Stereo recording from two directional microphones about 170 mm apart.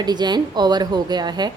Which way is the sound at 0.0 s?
25° right (ahead or behind).